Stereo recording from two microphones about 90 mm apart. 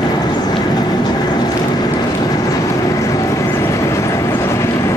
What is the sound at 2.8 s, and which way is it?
Vehicle, 40° left (ahead or behind).